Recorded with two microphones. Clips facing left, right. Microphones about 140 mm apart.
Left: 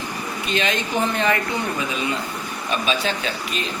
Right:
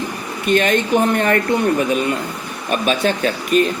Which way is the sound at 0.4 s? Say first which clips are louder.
Right 9 dB; 55° right (ahead or behind).